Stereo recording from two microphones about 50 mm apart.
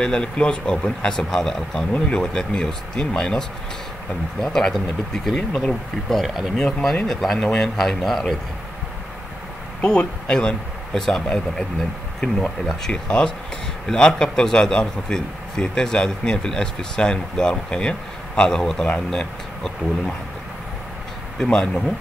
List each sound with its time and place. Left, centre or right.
0.0 s a man's voice: centre
6.2 s speech: centre
6.5 s a man's voice: centre
9.8 s a man's voice: centre
12.9 s a man's voice: centre
21.4 s a man's voice: centre